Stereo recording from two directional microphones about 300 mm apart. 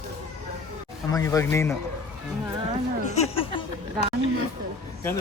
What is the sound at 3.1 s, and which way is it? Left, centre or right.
Speech, left.